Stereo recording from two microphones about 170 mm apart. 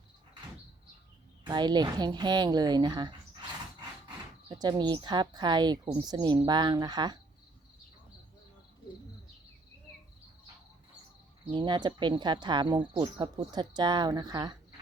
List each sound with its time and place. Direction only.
1.5 s speech: 25° right (ahead or behind)
4.4 s speech: 25° right (ahead or behind)
11.5 s speech: 25° right (ahead or behind)